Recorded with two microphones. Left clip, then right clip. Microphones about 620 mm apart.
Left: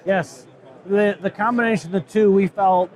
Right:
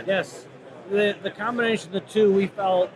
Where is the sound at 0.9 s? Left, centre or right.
Left.